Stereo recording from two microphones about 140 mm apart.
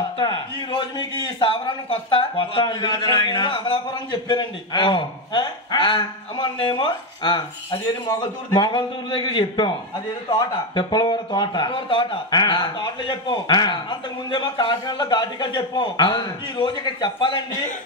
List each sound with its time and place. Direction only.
0.2 s a man's voice: 30° left (ahead or behind)
8.5 s a man's voice: 35° left (ahead or behind)